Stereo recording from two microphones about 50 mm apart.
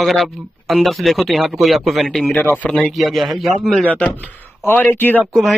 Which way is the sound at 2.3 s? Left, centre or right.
Left.